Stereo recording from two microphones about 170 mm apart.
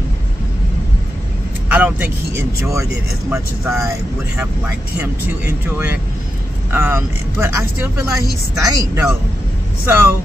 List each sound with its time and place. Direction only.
1.7 s speech: 10° right (ahead or behind)
4.9 s speech: 10° right (ahead or behind)
8.5 s a woman's voice: 20° right (ahead or behind)